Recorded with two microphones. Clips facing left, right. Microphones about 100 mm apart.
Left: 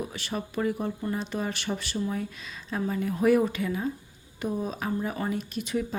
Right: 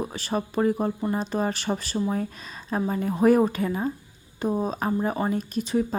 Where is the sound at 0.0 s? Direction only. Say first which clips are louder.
Right 5 dB; 35° right (ahead or behind).